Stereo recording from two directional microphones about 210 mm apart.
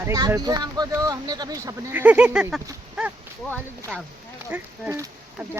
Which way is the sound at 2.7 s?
5° right (ahead or behind).